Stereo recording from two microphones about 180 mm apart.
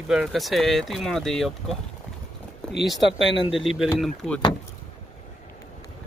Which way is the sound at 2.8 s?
Centre (ahead or behind).